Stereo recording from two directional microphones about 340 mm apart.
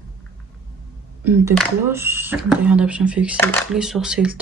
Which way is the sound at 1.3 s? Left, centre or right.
Centre.